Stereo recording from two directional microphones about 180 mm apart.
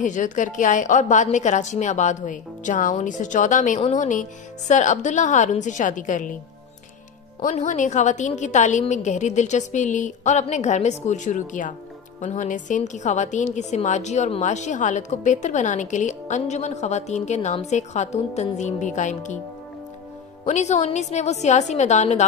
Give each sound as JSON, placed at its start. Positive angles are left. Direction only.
{"t": 0.0, "sound": "a woman's voice", "side_deg": 45}
{"t": 7.4, "sound": "a woman's voice", "side_deg": 45}
{"t": 20.4, "sound": "a woman's voice", "side_deg": 40}